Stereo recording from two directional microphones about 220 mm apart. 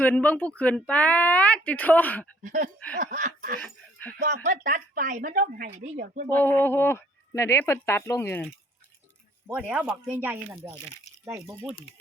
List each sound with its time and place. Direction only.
0.0 s speech: 5° left (ahead or behind)
2.4 s a sound: 35° right (ahead or behind)
3.0 s a woman's voice: 35° right (ahead or behind)
6.4 s speech: 10° left (ahead or behind)
9.5 s speech: 5° right (ahead or behind)